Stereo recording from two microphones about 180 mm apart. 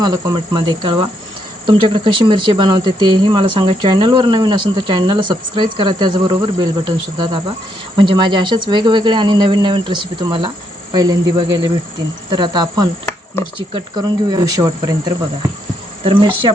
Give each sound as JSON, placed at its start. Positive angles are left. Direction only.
{"t": 0.0, "sound": "speech", "side_deg": -20}
{"t": 16.0, "sound": "speech", "side_deg": -30}